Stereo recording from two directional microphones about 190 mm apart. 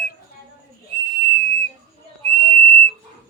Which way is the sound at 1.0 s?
25° right (ahead or behind).